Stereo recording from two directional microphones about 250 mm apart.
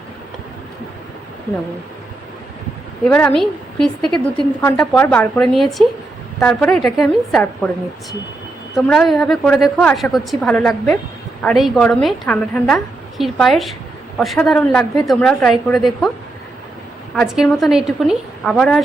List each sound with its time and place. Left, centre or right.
3.0 s a woman's voice: centre
8.7 s a woman's voice: centre
17.2 s a woman's voice: centre